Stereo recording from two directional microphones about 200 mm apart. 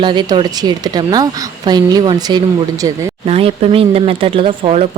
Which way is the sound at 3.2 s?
30° right (ahead or behind).